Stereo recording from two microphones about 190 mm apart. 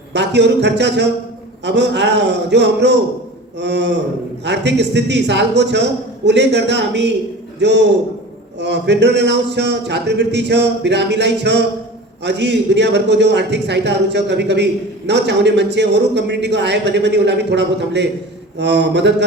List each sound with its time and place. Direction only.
0.1 s a man's voice: 65° right (ahead or behind)